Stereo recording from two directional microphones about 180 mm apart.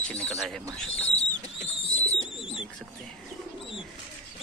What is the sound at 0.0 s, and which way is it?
Speech, 5° left (ahead or behind).